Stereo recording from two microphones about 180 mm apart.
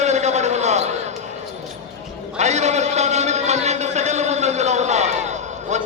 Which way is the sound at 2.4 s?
40° right (ahead or behind).